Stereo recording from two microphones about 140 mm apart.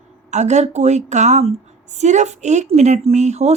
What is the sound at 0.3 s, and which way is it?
Speech, 55° right (ahead or behind).